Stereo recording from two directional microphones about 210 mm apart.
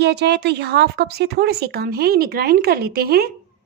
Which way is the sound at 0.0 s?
55° right (ahead or behind).